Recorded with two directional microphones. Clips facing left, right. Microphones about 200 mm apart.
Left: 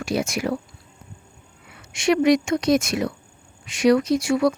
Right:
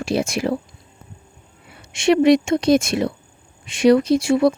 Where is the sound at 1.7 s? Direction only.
25° right (ahead or behind).